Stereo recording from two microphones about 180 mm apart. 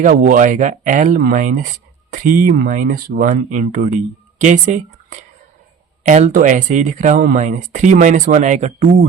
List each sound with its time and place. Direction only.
0.0 s speech: 45° right (ahead or behind)